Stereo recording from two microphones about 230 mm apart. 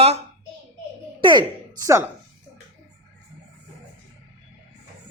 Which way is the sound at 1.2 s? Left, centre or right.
Centre.